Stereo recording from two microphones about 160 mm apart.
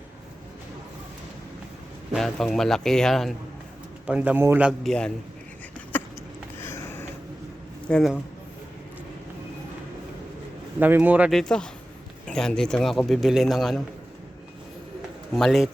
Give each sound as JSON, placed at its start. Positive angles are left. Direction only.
{"t": 2.1, "sound": "a man's voice", "side_deg": 0}
{"t": 4.8, "sound": "speech", "side_deg": 5}
{"t": 5.9, "sound": "a sound", "side_deg": 10}
{"t": 7.9, "sound": "speech", "side_deg": 5}
{"t": 10.8, "sound": "a man's voice", "side_deg": -10}
{"t": 11.3, "sound": "speech", "side_deg": 5}
{"t": 15.4, "sound": "speech", "side_deg": 0}